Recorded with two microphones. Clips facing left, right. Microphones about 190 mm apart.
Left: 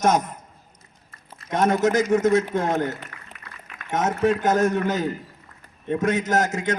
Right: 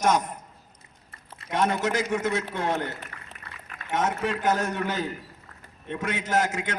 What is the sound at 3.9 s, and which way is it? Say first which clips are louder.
A man's voice: left 5 dB; 40° left (ahead or behind).